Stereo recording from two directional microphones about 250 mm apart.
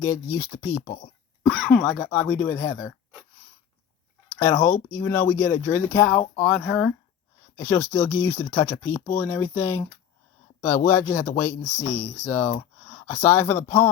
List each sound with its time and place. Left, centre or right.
0.0 s speech: centre
0.8 s speech: left
1.5 s speech: centre
4.3 s speech: centre